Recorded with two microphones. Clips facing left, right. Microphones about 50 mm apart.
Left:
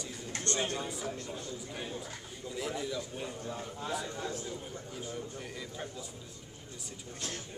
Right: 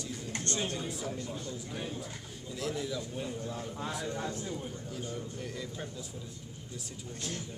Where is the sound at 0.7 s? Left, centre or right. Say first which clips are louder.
Even; centre.